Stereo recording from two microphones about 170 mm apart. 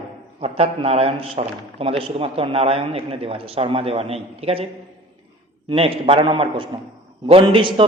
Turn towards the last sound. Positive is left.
turn(degrees=-30)  # may be behind; listen again after turning